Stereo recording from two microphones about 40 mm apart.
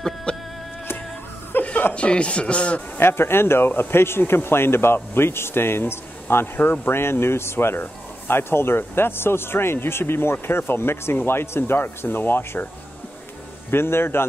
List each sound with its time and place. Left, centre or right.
0.0 s chicken: centre
1.6 s chuckle: left
2.0 s speech: left
3.0 s speech: left
6.9 s speech: left
13.7 s speech: left